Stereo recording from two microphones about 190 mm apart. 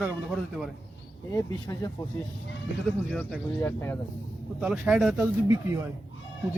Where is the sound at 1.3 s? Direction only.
20° left (ahead or behind).